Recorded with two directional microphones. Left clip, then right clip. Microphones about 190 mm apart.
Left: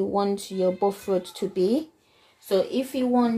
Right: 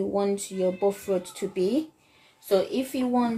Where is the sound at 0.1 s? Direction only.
35° left (ahead or behind).